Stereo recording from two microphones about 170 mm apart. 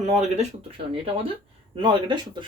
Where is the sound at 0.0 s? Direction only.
40° right (ahead or behind).